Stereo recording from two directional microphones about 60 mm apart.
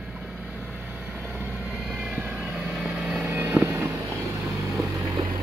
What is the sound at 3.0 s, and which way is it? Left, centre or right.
Vehicle, right.